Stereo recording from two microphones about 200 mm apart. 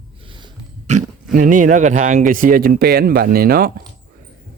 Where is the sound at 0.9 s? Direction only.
40° right (ahead or behind).